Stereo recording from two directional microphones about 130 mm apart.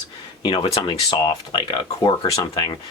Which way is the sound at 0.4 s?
45° left (ahead or behind).